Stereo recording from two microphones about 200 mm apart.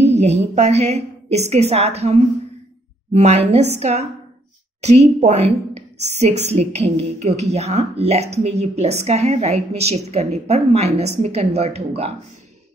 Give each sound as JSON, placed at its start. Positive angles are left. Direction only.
{"t": 0.2, "sound": "speech", "side_deg": -35}